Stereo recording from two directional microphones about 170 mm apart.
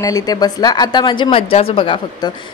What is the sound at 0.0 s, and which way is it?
A woman's voice, 20° left (ahead or behind).